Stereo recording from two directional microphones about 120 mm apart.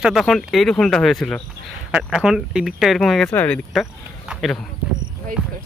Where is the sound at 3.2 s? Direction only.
10° left (ahead or behind).